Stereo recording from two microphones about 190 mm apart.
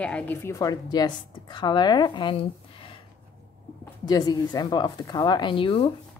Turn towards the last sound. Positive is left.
turn(degrees=25)  # may be behind; listen again after turning